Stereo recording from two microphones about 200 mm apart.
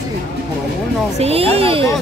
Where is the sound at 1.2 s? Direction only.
30° right (ahead or behind).